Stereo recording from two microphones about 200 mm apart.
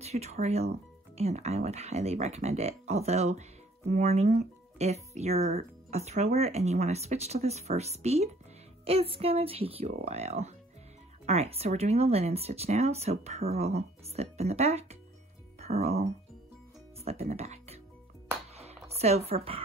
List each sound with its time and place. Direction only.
0.0 s speech: 30° right (ahead or behind)
18.5 s music: 30° right (ahead or behind)